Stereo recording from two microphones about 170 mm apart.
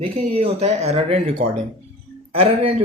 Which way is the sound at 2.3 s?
35° right (ahead or behind).